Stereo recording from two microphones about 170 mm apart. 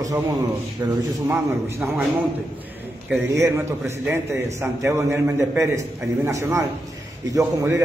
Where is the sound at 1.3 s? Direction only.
5° right (ahead or behind).